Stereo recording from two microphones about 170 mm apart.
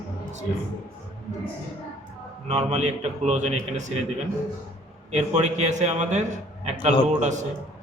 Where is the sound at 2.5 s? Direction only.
40° right (ahead or behind).